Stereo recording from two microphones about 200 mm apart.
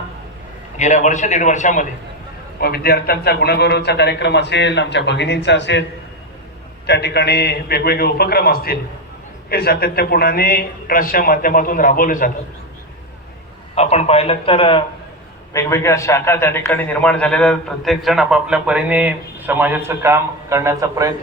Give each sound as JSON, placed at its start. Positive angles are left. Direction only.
{"t": 0.8, "sound": "a man's voice", "side_deg": 35}
{"t": 2.6, "sound": "a man's voice", "side_deg": 50}
{"t": 6.8, "sound": "a man's voice", "side_deg": 55}
{"t": 13.7, "sound": "a man's voice", "side_deg": 30}
{"t": 15.5, "sound": "a man's voice", "side_deg": 15}